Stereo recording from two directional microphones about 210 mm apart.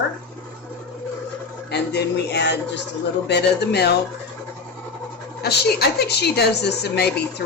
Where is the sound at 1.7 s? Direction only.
55° left (ahead or behind).